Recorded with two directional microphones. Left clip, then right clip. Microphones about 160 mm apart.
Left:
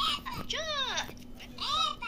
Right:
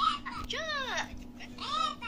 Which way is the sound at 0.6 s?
25° left (ahead or behind).